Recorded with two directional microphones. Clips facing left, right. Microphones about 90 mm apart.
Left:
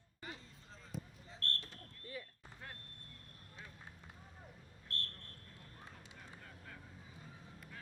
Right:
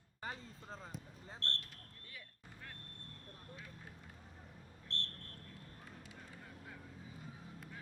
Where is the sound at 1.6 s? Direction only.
30° left (ahead or behind).